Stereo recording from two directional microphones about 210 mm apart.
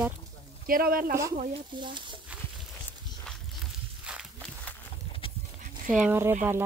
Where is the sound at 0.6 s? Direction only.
40° right (ahead or behind).